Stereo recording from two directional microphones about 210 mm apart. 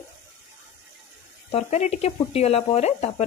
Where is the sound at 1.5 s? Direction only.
30° left (ahead or behind).